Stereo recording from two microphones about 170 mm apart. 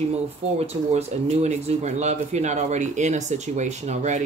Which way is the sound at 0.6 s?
35° right (ahead or behind).